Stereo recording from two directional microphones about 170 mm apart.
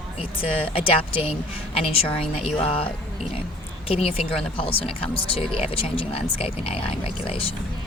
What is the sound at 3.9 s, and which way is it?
Speech, 35° left (ahead or behind).